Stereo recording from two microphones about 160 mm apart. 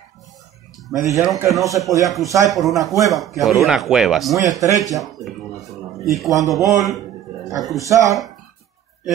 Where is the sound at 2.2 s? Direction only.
20° right (ahead or behind).